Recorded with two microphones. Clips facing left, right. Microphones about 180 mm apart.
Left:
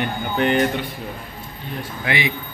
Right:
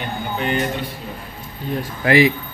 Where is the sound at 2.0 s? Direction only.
35° right (ahead or behind).